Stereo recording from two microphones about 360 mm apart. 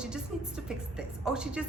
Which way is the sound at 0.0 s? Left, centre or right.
Centre.